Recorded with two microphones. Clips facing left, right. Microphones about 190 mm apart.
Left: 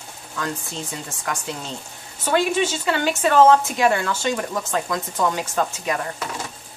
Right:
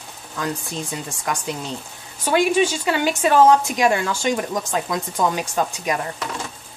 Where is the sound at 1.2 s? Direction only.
15° right (ahead or behind).